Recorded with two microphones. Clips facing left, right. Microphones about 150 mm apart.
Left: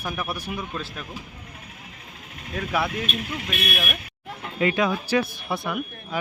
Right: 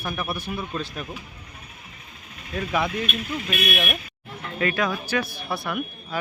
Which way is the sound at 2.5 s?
5° left (ahead or behind).